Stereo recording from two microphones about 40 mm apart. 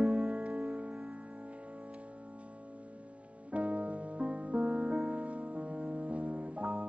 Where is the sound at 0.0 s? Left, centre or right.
Right.